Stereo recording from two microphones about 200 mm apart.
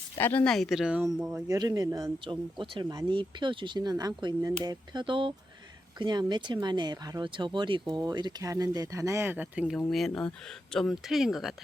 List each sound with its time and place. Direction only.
0.2 s speech: 10° left (ahead or behind)
1.3 s speech: 15° right (ahead or behind)